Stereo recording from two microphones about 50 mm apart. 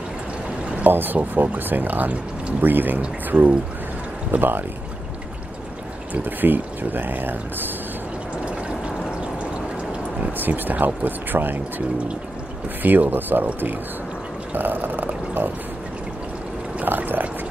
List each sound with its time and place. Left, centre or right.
0.8 s speech: right
4.3 s speech: right
6.1 s speech: right
8.5 s a sound: right
10.3 s speech: right
12.8 s speech: right
14.5 s a sound: right
16.8 s pour: right